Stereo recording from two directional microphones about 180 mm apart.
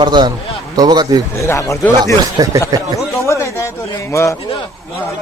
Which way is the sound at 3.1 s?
15° left (ahead or behind).